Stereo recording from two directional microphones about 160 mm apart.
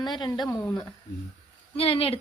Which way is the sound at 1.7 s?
35° left (ahead or behind).